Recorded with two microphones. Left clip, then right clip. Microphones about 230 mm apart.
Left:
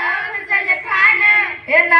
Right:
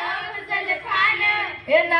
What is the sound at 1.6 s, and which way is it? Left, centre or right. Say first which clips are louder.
Speech: left 3 dB; right.